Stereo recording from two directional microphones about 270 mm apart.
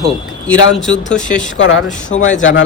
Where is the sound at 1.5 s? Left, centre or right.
Left.